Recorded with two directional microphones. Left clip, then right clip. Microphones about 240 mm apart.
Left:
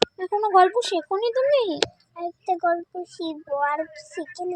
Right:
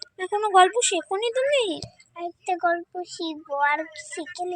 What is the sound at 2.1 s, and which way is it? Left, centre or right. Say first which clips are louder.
Speech: left 2 dB; centre.